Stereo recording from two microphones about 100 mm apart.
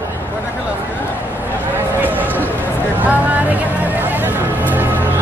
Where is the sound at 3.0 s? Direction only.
15° right (ahead or behind).